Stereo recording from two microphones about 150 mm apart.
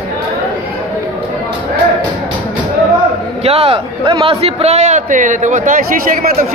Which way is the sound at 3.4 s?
40° right (ahead or behind).